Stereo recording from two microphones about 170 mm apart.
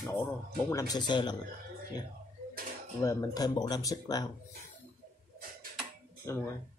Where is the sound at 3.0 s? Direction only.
20° left (ahead or behind).